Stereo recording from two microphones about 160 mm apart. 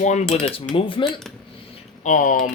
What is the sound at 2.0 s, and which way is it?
Speech, 55° left (ahead or behind).